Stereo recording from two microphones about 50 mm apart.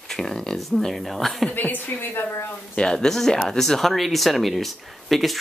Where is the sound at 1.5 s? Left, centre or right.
Left.